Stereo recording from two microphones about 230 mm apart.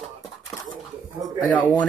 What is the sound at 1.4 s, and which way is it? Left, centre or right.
Speech, centre.